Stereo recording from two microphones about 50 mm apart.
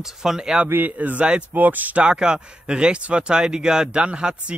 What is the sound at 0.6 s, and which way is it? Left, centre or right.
Speech, right.